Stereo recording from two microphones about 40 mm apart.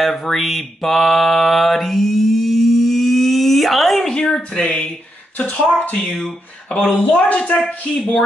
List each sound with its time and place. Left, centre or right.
0.0 s speech: centre
0.5 s mantra: centre
4.0 s a sound: centre
4.6 s speech: left
6.1 s speech: left